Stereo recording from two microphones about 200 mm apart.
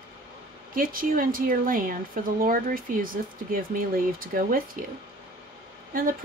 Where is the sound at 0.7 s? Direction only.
45° right (ahead or behind).